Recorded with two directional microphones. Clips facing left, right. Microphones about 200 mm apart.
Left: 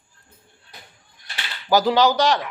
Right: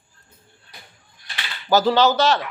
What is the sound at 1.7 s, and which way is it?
Speech, 15° left (ahead or behind).